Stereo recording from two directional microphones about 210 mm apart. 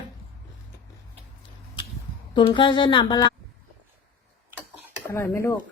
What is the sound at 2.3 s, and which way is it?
Speech, 20° left (ahead or behind).